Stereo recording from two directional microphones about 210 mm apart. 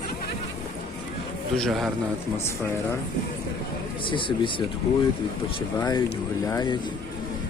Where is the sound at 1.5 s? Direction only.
Centre (ahead or behind).